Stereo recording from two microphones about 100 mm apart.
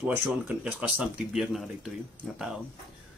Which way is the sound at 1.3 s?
Centre (ahead or behind).